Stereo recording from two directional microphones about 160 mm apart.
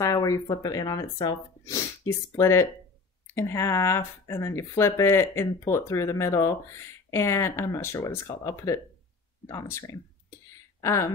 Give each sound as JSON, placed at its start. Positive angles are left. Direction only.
{"t": 0.0, "sound": "speech", "side_deg": 20}